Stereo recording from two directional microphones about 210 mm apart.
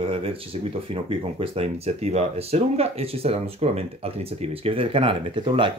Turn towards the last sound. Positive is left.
turn(degrees=-25)  # may be behind; listen again after turning